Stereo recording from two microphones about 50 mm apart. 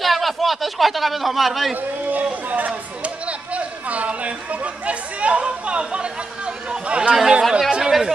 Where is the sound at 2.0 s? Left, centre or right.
Right; by 7.1 s centre.